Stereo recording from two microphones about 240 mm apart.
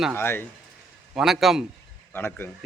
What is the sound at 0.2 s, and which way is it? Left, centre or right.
Speech, centre.